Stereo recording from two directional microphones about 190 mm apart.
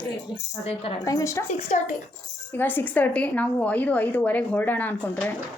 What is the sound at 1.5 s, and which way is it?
Speech, 35° left (ahead or behind).